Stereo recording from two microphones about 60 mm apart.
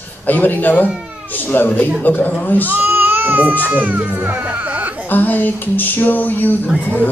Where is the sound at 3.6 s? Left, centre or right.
Right.